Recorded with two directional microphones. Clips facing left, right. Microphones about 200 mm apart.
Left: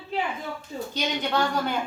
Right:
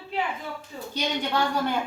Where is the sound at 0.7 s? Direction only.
30° left (ahead or behind).